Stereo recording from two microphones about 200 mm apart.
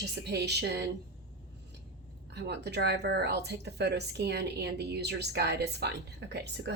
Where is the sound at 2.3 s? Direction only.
60° right (ahead or behind).